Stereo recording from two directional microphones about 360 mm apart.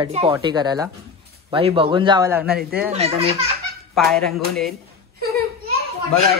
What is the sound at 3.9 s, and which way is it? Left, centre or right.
Speech, centre.